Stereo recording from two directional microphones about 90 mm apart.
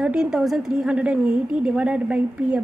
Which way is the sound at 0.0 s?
10° right (ahead or behind).